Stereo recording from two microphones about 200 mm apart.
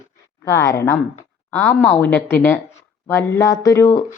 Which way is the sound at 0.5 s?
15° left (ahead or behind).